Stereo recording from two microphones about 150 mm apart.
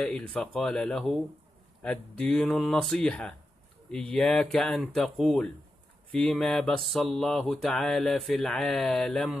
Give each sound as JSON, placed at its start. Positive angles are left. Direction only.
{"t": 0.0, "sound": "mantra", "side_deg": 5}